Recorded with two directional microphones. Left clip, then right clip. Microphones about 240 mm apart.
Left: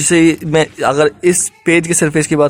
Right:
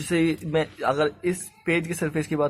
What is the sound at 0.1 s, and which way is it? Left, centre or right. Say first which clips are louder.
Speech: left 12 dB; left.